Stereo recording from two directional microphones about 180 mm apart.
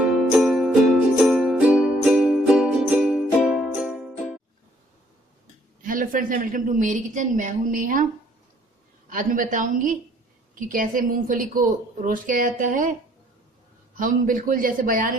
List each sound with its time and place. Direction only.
0.1 s music: centre (ahead or behind)
5.8 s a woman's voice: 50° right (ahead or behind)
9.0 s a woman's voice: 45° right (ahead or behind)
13.9 s a woman's voice: 50° right (ahead or behind)